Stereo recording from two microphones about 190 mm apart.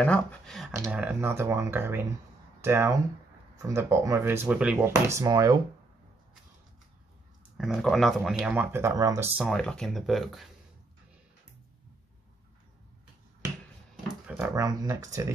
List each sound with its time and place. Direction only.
0.0 s speech: 5° left (ahead or behind)
0.9 s speech: 10° right (ahead or behind)
7.5 s speech: centre (ahead or behind); by 9.3 s 20° right (ahead or behind)
9.4 s speech: 5° left (ahead or behind)
14.0 s a sound: 5° right (ahead or behind)
14.5 s speech: 20° right (ahead or behind)